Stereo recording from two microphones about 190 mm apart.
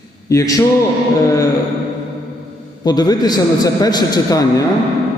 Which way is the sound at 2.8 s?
20° left (ahead or behind).